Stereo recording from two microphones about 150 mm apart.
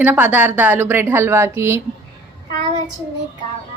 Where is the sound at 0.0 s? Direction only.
10° right (ahead or behind).